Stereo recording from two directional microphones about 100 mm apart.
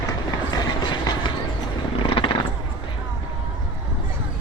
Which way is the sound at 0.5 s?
45° left (ahead or behind).